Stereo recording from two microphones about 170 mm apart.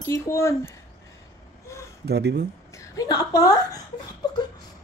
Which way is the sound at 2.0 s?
75° right (ahead or behind).